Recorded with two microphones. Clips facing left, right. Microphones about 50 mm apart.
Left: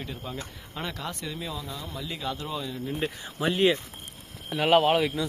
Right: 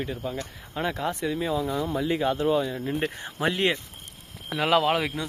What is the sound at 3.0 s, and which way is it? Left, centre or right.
Speech, right.